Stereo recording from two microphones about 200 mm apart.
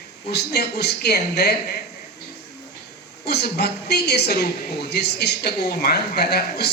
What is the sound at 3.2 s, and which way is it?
A woman's voice, 55° left (ahead or behind).